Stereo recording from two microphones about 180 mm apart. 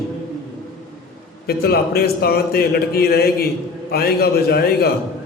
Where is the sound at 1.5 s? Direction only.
60° left (ahead or behind).